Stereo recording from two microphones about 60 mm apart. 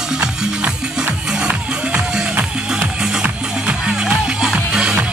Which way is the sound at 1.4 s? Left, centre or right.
Centre.